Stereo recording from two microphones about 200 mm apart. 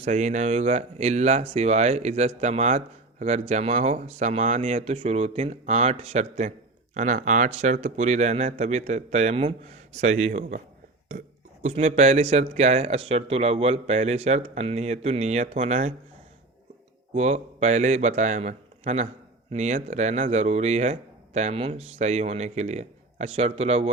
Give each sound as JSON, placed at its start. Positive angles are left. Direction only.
{"t": 0.0, "sound": "speech", "side_deg": -35}
{"t": 11.6, "sound": "speech", "side_deg": -35}
{"t": 17.2, "sound": "speech", "side_deg": -35}